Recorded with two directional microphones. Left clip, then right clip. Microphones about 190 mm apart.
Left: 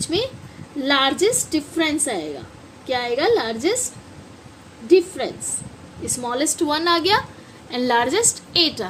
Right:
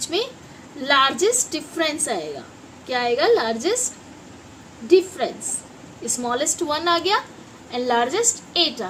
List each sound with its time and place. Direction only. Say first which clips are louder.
0.0 s a child's voice: left 1 dB; 20° left (ahead or behind)
4.9 s a woman's voice: left 1 dB; 20° left (ahead or behind); by 8.9 s 45° left (ahead or behind)